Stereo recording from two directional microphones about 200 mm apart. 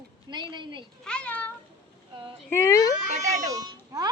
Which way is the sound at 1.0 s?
5° left (ahead or behind).